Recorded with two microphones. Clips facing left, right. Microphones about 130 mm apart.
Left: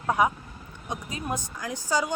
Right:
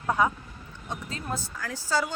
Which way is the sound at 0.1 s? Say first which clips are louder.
Left 1 dB; 15° left (ahead or behind).